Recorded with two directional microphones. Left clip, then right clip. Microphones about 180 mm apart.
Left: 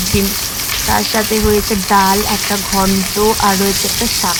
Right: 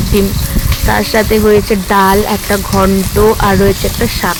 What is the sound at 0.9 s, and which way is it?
Chopping, 30° right (ahead or behind).